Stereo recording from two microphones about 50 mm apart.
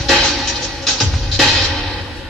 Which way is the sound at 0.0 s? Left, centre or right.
Centre.